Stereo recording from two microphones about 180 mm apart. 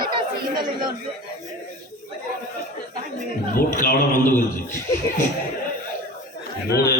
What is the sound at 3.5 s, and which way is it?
Speech, 50° left (ahead or behind).